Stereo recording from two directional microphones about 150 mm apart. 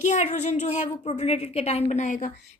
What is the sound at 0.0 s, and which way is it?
A woman's voice, 50° left (ahead or behind).